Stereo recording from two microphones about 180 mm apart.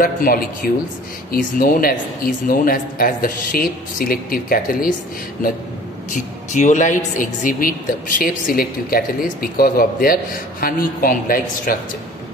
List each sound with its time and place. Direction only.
0.0 s speech: 55° left (ahead or behind)
6.1 s a man's voice: 45° left (ahead or behind)